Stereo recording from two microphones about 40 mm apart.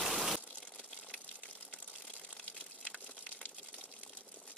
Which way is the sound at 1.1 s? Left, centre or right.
Right.